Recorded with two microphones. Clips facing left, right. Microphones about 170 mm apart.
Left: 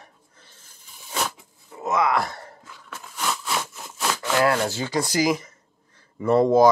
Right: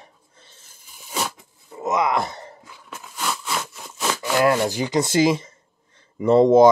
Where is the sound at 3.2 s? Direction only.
Centre (ahead or behind).